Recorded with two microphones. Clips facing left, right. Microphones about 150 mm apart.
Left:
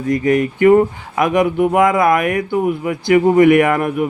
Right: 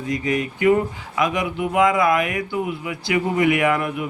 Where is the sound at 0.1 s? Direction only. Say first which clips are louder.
Left 8 dB; 55° left (ahead or behind).